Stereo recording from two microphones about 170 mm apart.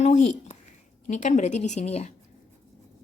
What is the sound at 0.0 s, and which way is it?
A woman's voice, 40° left (ahead or behind).